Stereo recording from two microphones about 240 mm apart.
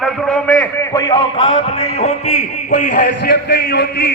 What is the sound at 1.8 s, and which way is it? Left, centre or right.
Music, left.